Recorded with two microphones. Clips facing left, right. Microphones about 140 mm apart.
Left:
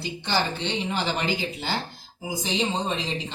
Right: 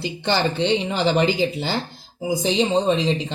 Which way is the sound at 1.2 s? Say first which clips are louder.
Right 8 dB; 25° right (ahead or behind).